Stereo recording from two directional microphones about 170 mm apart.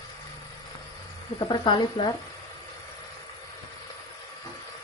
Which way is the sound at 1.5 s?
30° left (ahead or behind).